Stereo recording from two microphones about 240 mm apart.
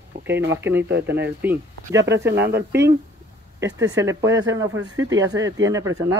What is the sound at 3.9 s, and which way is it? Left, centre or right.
Speech, centre.